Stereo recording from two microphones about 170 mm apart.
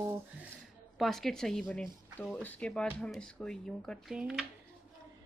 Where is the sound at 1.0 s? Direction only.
Centre (ahead or behind).